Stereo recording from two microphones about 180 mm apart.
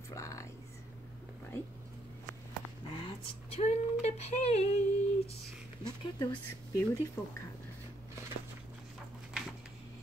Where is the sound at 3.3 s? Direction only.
35° left (ahead or behind).